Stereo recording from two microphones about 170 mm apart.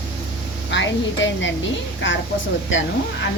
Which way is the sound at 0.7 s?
90° left.